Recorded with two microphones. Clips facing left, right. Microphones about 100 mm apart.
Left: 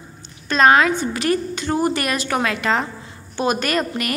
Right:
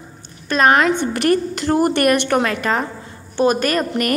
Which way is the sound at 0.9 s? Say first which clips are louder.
Right 3 dB; 60° right (ahead or behind).